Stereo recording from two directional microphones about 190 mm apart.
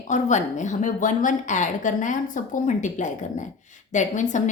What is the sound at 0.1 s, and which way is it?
Speech, 40° left (ahead or behind).